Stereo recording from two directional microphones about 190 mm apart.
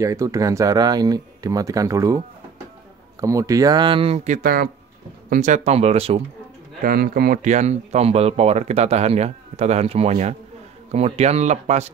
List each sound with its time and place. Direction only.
0.0 s speech: 15° right (ahead or behind); by 4.6 s 50° right (ahead or behind)
5.3 s speech: 40° right (ahead or behind)
6.8 s speech: 50° right (ahead or behind)